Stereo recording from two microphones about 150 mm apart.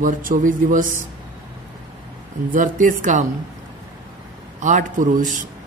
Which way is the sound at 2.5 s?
65° right (ahead or behind).